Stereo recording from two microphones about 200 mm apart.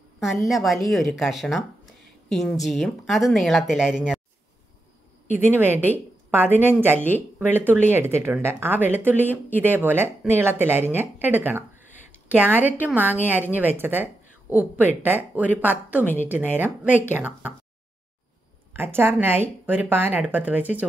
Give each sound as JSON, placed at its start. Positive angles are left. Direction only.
{"t": 0.2, "sound": "speech", "side_deg": 0}
{"t": 2.6, "sound": "speech", "side_deg": 0}
{"t": 5.5, "sound": "speech", "side_deg": -10}
{"t": 9.2, "sound": "speech", "side_deg": 10}
{"t": 9.6, "sound": "speech", "side_deg": -10}
{"t": 18.7, "sound": "speech", "side_deg": -10}